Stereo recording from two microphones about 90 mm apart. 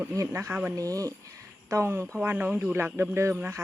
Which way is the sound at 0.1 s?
35° right (ahead or behind).